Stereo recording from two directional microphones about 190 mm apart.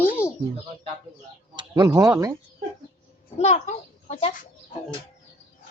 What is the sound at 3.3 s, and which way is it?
A child's voice, 35° left (ahead or behind).